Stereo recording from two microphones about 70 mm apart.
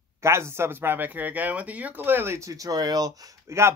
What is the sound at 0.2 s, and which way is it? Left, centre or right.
Speech, right.